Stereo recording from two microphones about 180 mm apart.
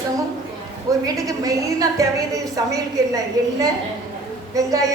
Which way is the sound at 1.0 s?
20° right (ahead or behind).